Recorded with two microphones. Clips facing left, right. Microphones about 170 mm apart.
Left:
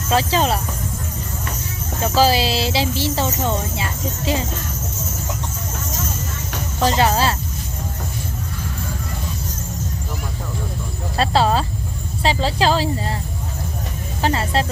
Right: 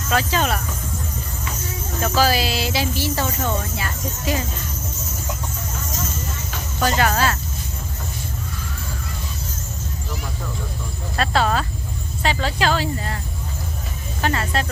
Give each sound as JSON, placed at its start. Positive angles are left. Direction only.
{"t": 0.1, "sound": "speech", "side_deg": 30}
{"t": 2.0, "sound": "speech", "side_deg": 30}
{"t": 6.7, "sound": "speech", "side_deg": 30}
{"t": 11.2, "sound": "speech", "side_deg": 30}
{"t": 14.2, "sound": "speech", "side_deg": 30}